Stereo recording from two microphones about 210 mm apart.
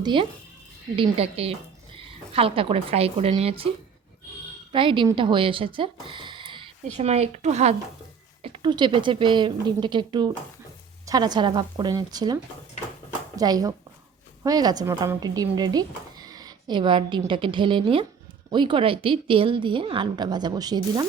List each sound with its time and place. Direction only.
0.0 s speech: 25° right (ahead or behind)
4.7 s speech: 25° right (ahead or behind)